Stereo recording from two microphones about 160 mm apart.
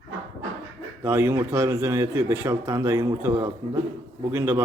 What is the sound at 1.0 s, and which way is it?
A man's voice, 15° right (ahead or behind).